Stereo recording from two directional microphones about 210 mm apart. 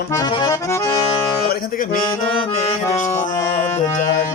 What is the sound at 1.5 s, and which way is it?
Speech, 45° left (ahead or behind).